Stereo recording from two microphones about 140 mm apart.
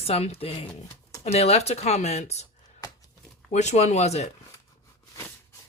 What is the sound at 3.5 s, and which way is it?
Speech, 55° left (ahead or behind).